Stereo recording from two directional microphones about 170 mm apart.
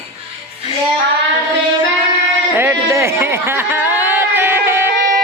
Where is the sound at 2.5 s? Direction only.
15° right (ahead or behind).